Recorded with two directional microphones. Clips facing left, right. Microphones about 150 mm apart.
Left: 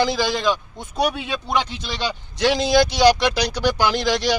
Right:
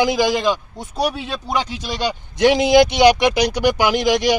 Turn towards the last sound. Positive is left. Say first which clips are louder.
# right 4 dB
turn(degrees=-15)  # may be behind; listen again after turning